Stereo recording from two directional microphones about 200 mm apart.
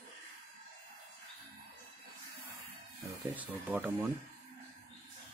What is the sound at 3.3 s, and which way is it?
Speech, 5° right (ahead or behind).